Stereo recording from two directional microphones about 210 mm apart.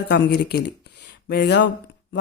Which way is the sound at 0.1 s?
50° left (ahead or behind).